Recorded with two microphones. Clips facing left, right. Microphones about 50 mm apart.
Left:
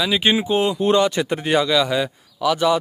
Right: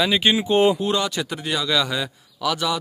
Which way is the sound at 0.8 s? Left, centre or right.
Left.